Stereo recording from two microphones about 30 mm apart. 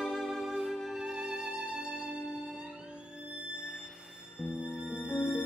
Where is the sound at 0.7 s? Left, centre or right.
Centre.